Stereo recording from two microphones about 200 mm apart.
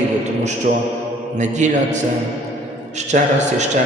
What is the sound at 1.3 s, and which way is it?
A man's voice, 35° right (ahead or behind).